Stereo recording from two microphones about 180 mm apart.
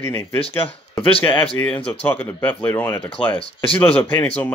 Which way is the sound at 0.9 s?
30° left (ahead or behind).